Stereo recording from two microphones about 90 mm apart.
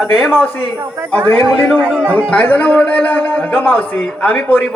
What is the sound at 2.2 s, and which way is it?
A man's voice, 15° left (ahead or behind).